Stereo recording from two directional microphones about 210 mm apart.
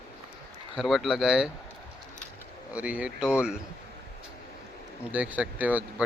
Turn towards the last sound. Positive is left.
turn(degrees=-5)  # may be behind; listen again after turning